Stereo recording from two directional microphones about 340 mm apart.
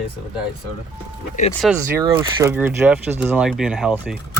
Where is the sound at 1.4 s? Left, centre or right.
Left.